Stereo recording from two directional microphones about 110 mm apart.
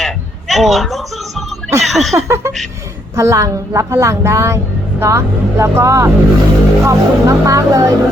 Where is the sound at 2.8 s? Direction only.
30° right (ahead or behind).